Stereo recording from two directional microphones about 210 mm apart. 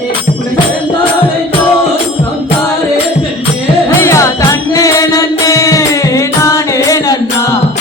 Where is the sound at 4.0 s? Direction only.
15° left (ahead or behind).